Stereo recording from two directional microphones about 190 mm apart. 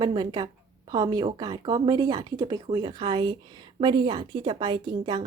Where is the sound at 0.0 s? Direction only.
20° right (ahead or behind).